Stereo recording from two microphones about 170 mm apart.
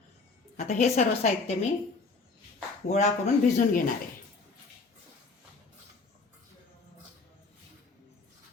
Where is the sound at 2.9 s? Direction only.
45° left (ahead or behind).